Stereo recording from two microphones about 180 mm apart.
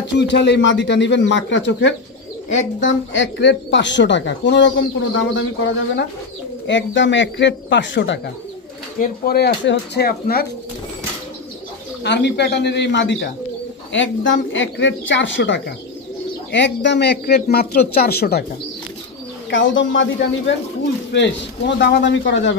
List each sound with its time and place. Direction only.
0.1 s speech: 80° left
2.8 s speech: 90° left
9.0 s a man's voice: 55° left (ahead or behind)
12.0 s a man's voice: 70° left (ahead or behind)
13.9 s speech: 90° left
16.5 s a man's voice: 80° left; by 18.4 s 60° left (ahead or behind)
19.5 s speech: 90° left
21.1 s speech: 75° left (ahead or behind)